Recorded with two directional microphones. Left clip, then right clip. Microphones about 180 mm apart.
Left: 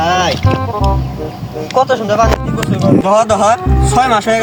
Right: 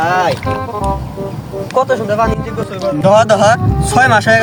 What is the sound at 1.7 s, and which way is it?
Speech, 10° right (ahead or behind).